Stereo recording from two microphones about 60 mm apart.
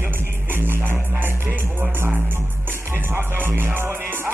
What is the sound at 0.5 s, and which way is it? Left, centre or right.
Music, right.